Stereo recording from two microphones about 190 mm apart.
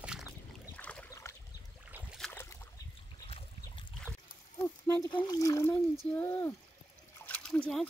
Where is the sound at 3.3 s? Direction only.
30° left (ahead or behind).